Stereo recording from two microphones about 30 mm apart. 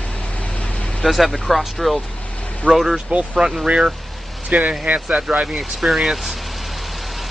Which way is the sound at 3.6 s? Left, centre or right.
Right.